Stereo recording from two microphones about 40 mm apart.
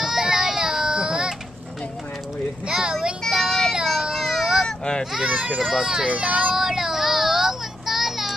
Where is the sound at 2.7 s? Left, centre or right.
Centre.